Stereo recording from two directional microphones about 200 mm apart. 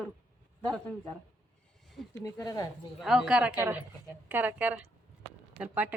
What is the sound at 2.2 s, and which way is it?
Speech, 15° left (ahead or behind).